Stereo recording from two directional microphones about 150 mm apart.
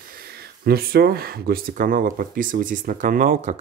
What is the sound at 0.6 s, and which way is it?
Speech, 90° right.